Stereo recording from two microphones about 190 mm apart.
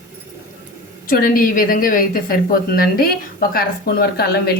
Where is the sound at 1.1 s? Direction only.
50° left (ahead or behind).